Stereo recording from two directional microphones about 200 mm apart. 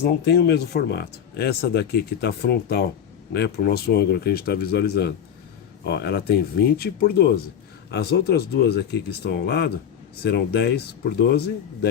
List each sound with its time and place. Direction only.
0.0 s speech: 55° left (ahead or behind)